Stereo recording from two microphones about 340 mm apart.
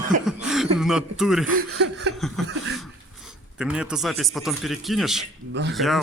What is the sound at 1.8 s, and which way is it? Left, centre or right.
Speech, right.